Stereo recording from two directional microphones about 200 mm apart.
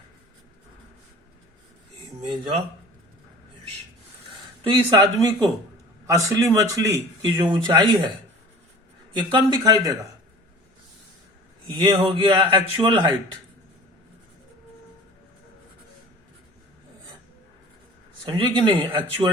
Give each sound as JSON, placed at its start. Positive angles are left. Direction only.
{"t": 4.6, "sound": "a man's voice", "side_deg": -25}
{"t": 9.1, "sound": "a man's voice", "side_deg": -20}
{"t": 11.7, "sound": "a man's voice", "side_deg": -20}
{"t": 18.3, "sound": "a man's voice", "side_deg": -25}